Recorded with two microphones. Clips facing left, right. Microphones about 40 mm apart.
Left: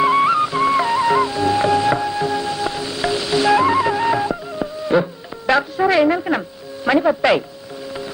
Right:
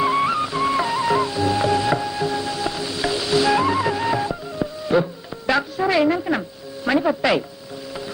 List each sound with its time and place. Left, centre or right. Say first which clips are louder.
0.0 s music: left 5 dB; centre
6.8 s speech: left 4 dB; centre